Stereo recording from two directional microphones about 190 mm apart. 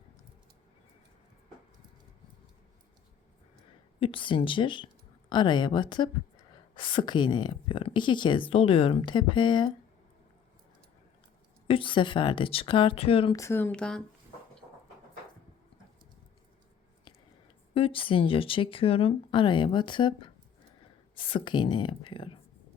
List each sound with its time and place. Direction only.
4.0 s speech: 25° left (ahead or behind)
11.7 s speech: 25° left (ahead or behind)
13.3 s speech: 15° left (ahead or behind)
17.7 s speech: 30° left (ahead or behind)